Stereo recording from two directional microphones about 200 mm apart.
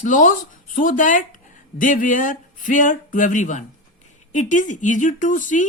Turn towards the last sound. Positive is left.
turn(degrees=40)  # may be behind; listen again after turning